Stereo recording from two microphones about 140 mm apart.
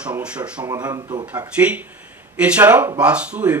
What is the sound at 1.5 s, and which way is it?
Speech, 10° right (ahead or behind).